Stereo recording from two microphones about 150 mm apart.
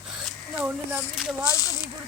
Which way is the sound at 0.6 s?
5° right (ahead or behind).